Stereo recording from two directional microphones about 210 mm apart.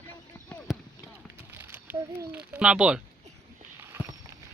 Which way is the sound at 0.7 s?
Centre (ahead or behind).